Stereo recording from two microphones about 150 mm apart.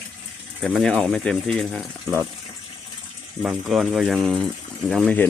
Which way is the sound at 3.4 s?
Centre (ahead or behind).